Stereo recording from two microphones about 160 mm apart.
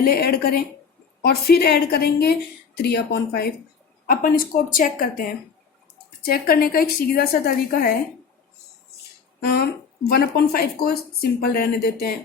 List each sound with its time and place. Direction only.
0.0 s a woman's voice: 75° left (ahead or behind)
4.0 s a woman's voice: 65° left (ahead or behind)
6.2 s speech: 70° left (ahead or behind)
9.4 s speech: 90° left
10.1 s speech: 75° left (ahead or behind)